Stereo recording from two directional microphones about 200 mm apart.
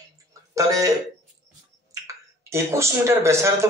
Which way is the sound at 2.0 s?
15° right (ahead or behind).